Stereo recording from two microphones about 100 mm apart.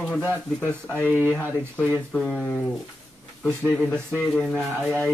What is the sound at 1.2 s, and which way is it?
Speech, 15° left (ahead or behind).